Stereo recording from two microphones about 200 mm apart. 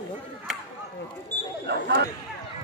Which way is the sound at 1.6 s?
60° right (ahead or behind).